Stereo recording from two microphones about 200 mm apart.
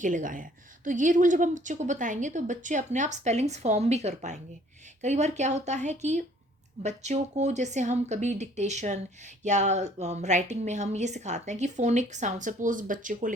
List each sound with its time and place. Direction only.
0.0 s a woman's voice: 40° right (ahead or behind)